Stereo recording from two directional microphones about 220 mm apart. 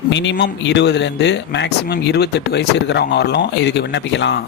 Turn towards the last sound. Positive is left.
turn(degrees=50)  # may be behind; listen again after turning